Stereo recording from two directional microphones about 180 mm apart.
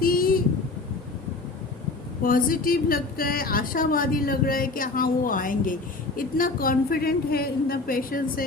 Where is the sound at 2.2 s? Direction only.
50° left (ahead or behind).